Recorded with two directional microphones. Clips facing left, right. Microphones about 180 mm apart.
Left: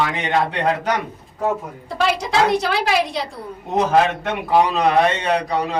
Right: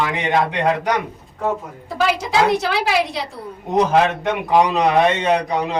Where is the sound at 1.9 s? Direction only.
5° right (ahead or behind).